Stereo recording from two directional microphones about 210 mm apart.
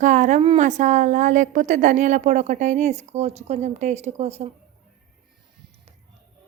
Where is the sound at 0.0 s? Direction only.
35° right (ahead or behind).